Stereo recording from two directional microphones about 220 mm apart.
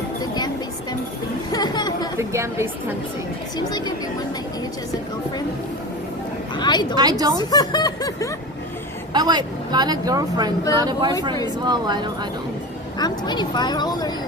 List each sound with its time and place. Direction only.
0.2 s music: 20° left (ahead or behind)
1.5 s chatter: 20° left (ahead or behind)
2.1 s a woman's voice: 10° right (ahead or behind)
3.6 s speech: 20° left (ahead or behind)
6.6 s speech: 20° left (ahead or behind)
6.9 s a woman's voice: 20° right (ahead or behind)
7.3 s speech: 20° left (ahead or behind)
9.1 s a woman's voice: 20° right (ahead or behind)
13.0 s speech: 20° left (ahead or behind)